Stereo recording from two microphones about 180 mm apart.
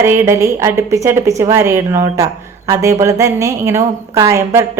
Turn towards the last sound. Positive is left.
turn(degrees=-15)  # may be behind; listen again after turning